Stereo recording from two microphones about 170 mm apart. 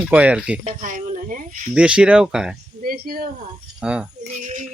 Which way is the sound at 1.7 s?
5° right (ahead or behind).